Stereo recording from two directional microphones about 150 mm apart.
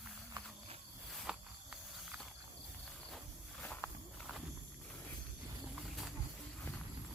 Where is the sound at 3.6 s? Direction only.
10° left (ahead or behind).